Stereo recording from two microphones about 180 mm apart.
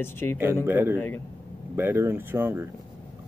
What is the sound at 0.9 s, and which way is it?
Speech, 10° left (ahead or behind).